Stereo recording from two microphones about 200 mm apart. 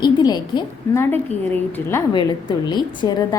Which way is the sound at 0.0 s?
20° left (ahead or behind).